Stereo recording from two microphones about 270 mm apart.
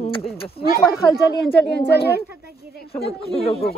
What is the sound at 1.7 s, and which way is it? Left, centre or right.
Speech, left.